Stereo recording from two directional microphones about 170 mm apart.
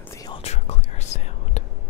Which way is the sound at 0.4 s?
40° left (ahead or behind).